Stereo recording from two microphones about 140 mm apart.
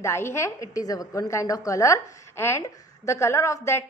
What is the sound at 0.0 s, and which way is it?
A woman's voice, 20° left (ahead or behind).